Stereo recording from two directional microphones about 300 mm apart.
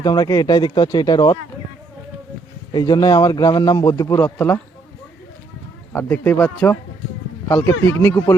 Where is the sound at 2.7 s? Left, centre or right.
Centre.